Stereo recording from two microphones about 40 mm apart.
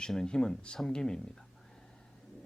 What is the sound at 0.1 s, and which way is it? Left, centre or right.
Speech, centre.